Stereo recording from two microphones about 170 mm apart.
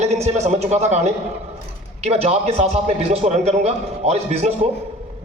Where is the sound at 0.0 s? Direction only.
40° right (ahead or behind).